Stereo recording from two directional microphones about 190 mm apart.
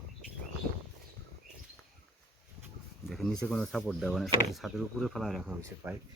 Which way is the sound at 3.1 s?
Centre (ahead or behind).